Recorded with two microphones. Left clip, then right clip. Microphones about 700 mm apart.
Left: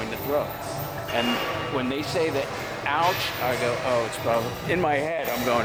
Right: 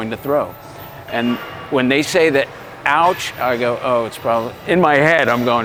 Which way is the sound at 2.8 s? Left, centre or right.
Right.